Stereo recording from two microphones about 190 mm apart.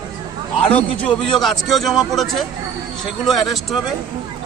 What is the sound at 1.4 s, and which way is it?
A man's voice, centre (ahead or behind).